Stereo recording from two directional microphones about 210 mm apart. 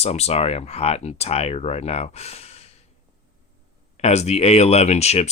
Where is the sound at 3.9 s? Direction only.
30° left (ahead or behind).